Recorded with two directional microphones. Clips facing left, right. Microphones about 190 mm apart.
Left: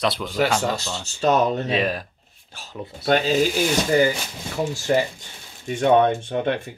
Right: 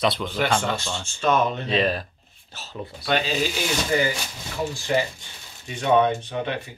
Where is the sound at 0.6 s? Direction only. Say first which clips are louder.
Left 2 dB; 40° left (ahead or behind).